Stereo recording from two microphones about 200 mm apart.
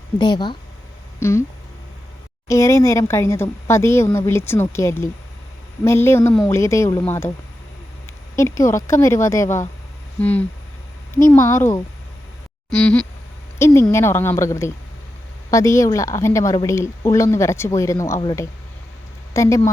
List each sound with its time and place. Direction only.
0.2 s a woman's voice: 20° left (ahead or behind)
2.5 s a woman's voice: 15° left (ahead or behind)
8.4 s a woman's voice: 15° left (ahead or behind)